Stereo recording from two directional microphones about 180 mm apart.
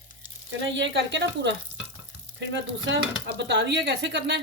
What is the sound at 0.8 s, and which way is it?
Speech, 80° right.